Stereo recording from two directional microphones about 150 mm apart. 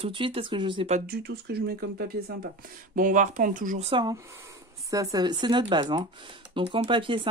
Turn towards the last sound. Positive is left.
turn(degrees=-35)  # may be behind; listen again after turning